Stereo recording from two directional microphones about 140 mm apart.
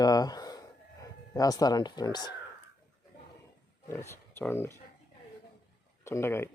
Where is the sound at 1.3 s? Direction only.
25° left (ahead or behind).